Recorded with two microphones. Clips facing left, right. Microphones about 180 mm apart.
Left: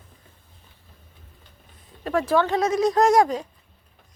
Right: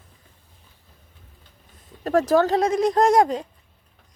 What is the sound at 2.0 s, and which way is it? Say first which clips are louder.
Speech: right 3 dB; 40° right (ahead or behind).